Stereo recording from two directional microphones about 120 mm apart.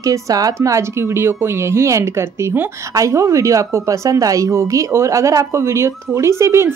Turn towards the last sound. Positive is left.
turn(degrees=-20)  # may be behind; listen again after turning